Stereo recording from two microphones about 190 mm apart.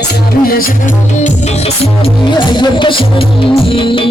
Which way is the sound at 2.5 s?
25° left (ahead or behind).